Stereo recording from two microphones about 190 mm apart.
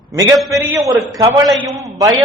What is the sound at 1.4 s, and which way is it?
Speech, centre (ahead or behind).